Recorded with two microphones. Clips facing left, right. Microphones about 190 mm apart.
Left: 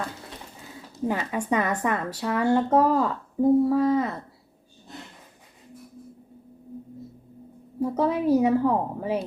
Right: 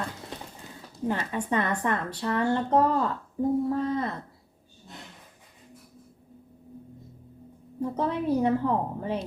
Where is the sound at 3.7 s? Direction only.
85° left.